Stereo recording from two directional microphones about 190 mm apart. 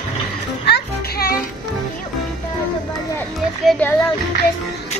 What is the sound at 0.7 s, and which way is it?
Music, 55° left (ahead or behind).